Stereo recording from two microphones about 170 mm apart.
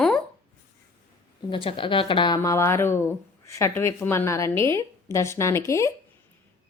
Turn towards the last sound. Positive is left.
turn(degrees=15)  # may be behind; listen again after turning